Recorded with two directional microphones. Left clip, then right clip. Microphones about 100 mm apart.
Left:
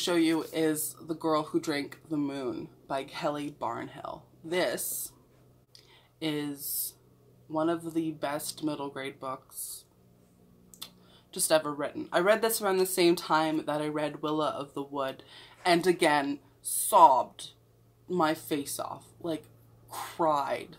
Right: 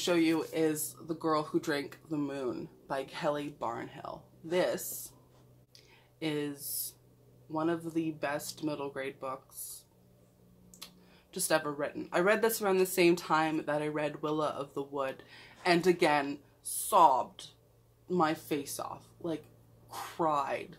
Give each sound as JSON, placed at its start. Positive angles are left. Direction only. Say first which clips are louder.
{"t": 0.0, "sound": "speech", "louder": "left 2 dB", "side_deg": 35}
{"t": 6.1, "sound": "speech", "louder": "left 2 dB", "side_deg": 35}
{"t": 10.8, "sound": "a sound", "louder": "left 5 dB", "side_deg": 30}
{"t": 11.3, "sound": "speech", "louder": "left 4 dB", "side_deg": 35}